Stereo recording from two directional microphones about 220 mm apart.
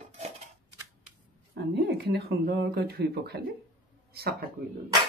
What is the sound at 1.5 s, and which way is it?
Speech, 50° right (ahead or behind).